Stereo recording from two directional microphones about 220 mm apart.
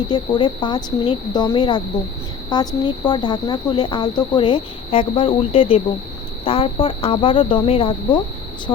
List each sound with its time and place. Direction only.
0.1 s speech: 20° left (ahead or behind)